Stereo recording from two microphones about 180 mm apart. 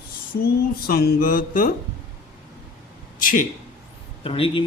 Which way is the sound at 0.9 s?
55° left (ahead or behind).